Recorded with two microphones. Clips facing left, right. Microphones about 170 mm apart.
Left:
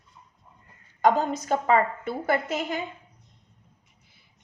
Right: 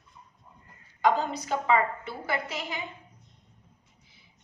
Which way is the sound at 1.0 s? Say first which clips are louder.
Left 3 dB; 45° left (ahead or behind).